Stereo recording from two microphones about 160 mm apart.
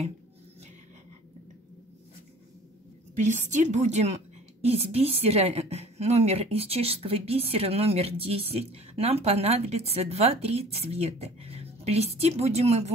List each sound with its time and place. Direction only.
3.3 s a woman's voice: 50° right (ahead or behind)